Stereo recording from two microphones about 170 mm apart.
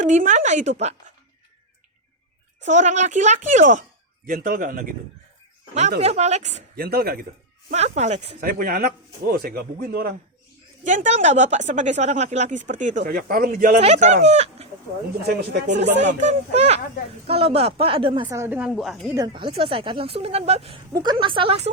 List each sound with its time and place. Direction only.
0.0 s speech: 45° right (ahead or behind)
2.6 s speech: 45° right (ahead or behind)
6.0 s speech: 40° right (ahead or behind)
6.7 s speech: 65° right (ahead or behind)
7.7 s speech: 40° right (ahead or behind)
8.4 s speech: 60° right (ahead or behind)
10.8 s speech: 50° right (ahead or behind)
15.7 s speech: 90° right
16.6 s speech: 40° right (ahead or behind)
18.3 s a woman's voice: 15° right (ahead or behind)
19.1 s speech: 25° right (ahead or behind)
20.9 s a woman's voice: 25° right (ahead or behind)